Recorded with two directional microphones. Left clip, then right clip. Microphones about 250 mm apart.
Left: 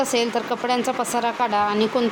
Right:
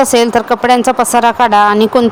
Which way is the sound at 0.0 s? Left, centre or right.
Right.